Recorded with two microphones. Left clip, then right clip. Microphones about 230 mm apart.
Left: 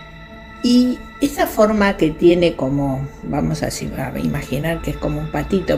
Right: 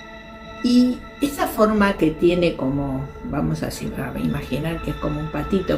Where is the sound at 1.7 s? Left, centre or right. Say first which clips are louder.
Left 2 dB; left.